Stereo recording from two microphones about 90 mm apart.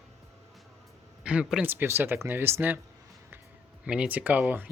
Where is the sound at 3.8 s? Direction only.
10° right (ahead or behind).